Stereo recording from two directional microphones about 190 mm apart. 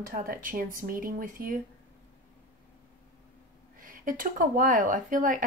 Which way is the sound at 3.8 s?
45° right (ahead or behind).